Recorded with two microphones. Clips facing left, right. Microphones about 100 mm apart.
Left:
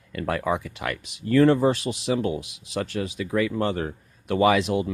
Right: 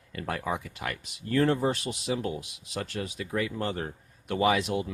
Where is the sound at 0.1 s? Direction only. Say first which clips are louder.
Left 6 dB; 90° left.